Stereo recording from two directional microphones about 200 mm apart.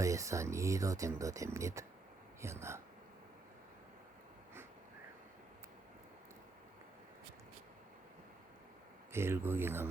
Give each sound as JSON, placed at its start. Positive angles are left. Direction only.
{"t": 0.0, "sound": "speech", "side_deg": -15}
{"t": 9.1, "sound": "speech", "side_deg": -10}